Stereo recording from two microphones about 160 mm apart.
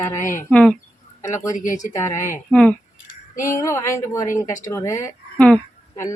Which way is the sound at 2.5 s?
5° left (ahead or behind).